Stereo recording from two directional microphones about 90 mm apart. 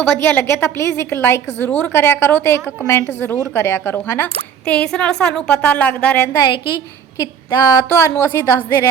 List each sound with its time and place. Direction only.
0.2 s a woman's voice: 25° left (ahead or behind)
4.6 s a woman's voice: 10° left (ahead or behind)
6.5 s a woman's voice: 60° left (ahead or behind)
7.2 s speech: 40° left (ahead or behind)
7.9 s a woman's voice: 30° left (ahead or behind)